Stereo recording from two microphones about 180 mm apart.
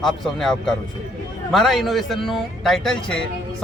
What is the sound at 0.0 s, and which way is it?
A man's voice, centre (ahead or behind).